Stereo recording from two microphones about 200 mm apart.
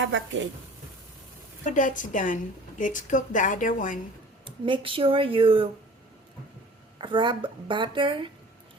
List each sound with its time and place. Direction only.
0.0 s a woman's voice: 70° right (ahead or behind)
1.6 s a woman's voice: 40° left (ahead or behind)
4.4 s a woman's voice: 25° right (ahead or behind)
7.0 s a woman's voice: 25° right (ahead or behind)